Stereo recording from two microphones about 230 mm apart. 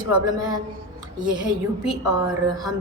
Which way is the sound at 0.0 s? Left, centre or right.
Centre.